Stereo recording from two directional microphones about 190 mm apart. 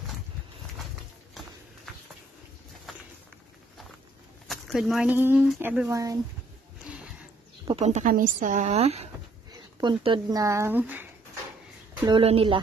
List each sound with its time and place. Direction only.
4.5 s speech: centre (ahead or behind); by 6.1 s 15° right (ahead or behind)
7.6 s speech: 35° right (ahead or behind); by 11.1 s 10° right (ahead or behind)
12.2 s speech: 30° right (ahead or behind)